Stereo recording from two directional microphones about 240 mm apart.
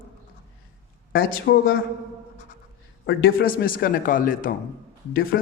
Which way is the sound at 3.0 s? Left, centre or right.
Left.